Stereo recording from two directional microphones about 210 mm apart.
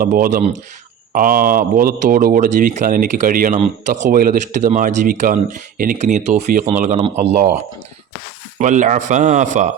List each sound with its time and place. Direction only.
0.0 s speech: 40° right (ahead or behind)
8.5 s speech: 35° right (ahead or behind)